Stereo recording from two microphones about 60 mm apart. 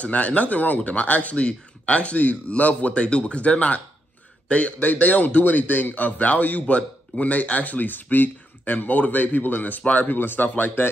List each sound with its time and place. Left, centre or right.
0.0 s speech: left